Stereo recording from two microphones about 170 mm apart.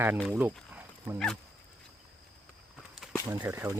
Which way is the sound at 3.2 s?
15° right (ahead or behind).